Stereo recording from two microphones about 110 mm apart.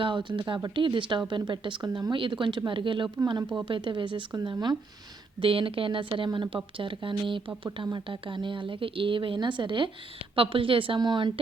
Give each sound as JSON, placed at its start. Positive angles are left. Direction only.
{"t": 0.0, "sound": "speech", "side_deg": -45}
{"t": 5.4, "sound": "speech", "side_deg": -55}